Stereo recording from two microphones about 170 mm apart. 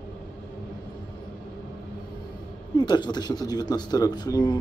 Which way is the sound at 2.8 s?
25° left (ahead or behind).